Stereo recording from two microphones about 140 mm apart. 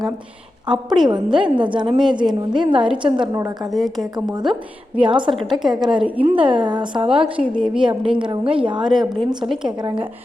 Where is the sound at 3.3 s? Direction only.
25° right (ahead or behind).